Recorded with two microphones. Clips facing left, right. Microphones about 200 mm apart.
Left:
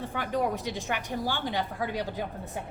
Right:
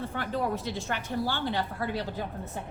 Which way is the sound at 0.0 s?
15° left (ahead or behind).